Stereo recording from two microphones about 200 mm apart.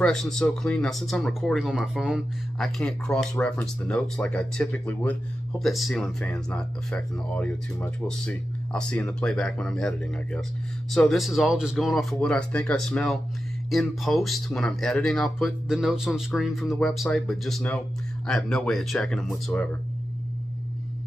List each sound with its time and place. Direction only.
0.0 s speech: centre (ahead or behind)